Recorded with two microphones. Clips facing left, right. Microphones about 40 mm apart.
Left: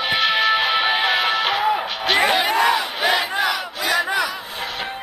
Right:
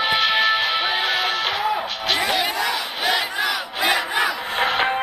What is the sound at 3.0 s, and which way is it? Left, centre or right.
Battle cry, centre.